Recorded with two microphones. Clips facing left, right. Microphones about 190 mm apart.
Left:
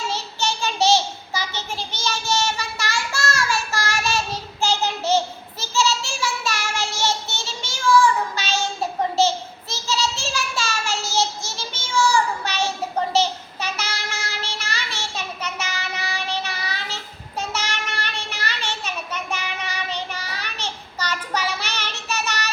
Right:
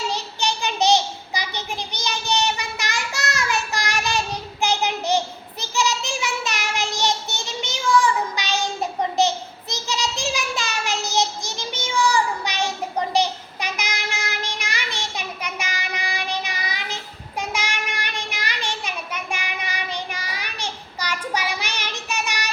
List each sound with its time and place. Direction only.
0.1 s child singing: 15° right (ahead or behind)
9.1 s a sound: 15° right (ahead or behind)
13.1 s child singing: 15° right (ahead or behind)